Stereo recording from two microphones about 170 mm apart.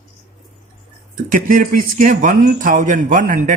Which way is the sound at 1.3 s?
55° right (ahead or behind).